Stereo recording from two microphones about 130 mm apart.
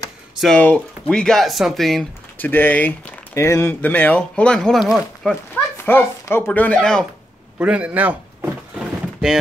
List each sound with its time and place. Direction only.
0.6 s speech: 10° left (ahead or behind)
2.3 s speech: 15° left (ahead or behind)
5.9 s speech: 15° left (ahead or behind)
7.5 s door: 10° right (ahead or behind)